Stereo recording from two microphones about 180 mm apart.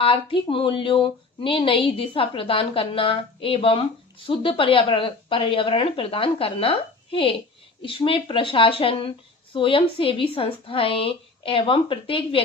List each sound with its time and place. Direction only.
0.0 s a woman's voice: 30° left (ahead or behind)